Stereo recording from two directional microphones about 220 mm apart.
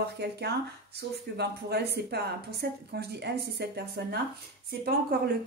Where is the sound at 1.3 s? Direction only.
50° right (ahead or behind).